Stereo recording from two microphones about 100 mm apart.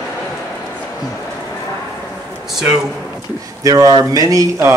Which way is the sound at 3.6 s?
35° right (ahead or behind).